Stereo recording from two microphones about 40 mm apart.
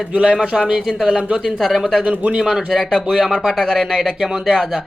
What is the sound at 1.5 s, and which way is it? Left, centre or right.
Speech, centre.